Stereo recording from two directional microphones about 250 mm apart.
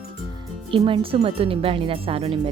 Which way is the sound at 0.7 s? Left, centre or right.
Right.